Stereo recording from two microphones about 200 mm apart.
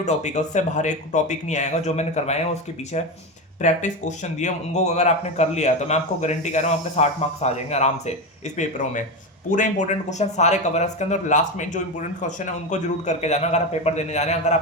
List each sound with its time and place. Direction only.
0.0 s speech: 35° left (ahead or behind)